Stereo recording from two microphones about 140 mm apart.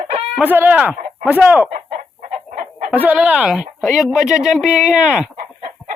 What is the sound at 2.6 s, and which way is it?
Chicken, 55° right (ahead or behind).